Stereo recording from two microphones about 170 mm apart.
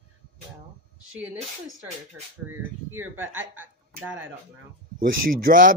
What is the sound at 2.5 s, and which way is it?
Speech, 15° right (ahead or behind).